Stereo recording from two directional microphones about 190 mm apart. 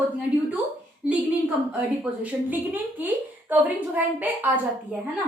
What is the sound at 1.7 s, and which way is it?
Speech, 5° right (ahead or behind).